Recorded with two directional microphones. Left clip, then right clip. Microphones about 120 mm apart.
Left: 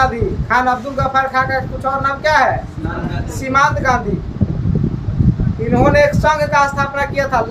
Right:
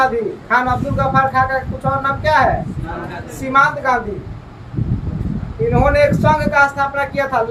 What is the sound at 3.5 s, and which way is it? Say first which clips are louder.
Speech: even; 35° left (ahead or behind).